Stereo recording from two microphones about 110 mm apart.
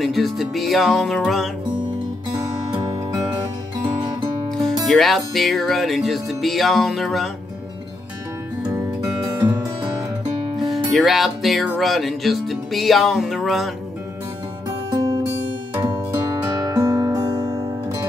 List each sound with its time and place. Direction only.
0.0 s music: centre (ahead or behind)
2.7 s music: 40° right (ahead or behind)
4.8 s music: centre (ahead or behind)
10.6 s speech: centre (ahead or behind)
11.8 s music: centre (ahead or behind)
15.0 s music: 35° right (ahead or behind)